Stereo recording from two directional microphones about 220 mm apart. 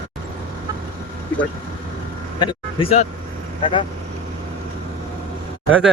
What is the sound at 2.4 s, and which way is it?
Vehicle, 20° left (ahead or behind).